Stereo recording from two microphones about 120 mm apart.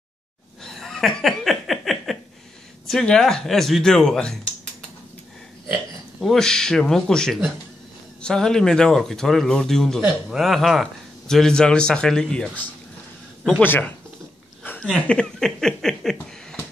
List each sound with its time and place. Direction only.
0.7 s laughter: centre (ahead or behind)
2.9 s speech: 5° left (ahead or behind)
6.2 s speech: 5° left (ahead or behind)
13.5 s speech: 15° left (ahead or behind)
14.6 s a sound: 10° left (ahead or behind)
15.0 s speech: 5° left (ahead or behind)